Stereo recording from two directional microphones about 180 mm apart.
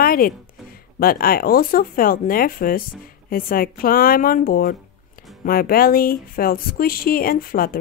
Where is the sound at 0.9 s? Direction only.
55° left (ahead or behind).